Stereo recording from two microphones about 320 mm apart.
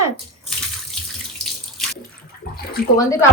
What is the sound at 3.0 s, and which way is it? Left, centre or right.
Speech, centre.